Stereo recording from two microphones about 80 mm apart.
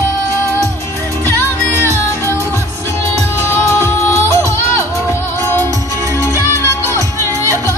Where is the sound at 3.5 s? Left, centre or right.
Left.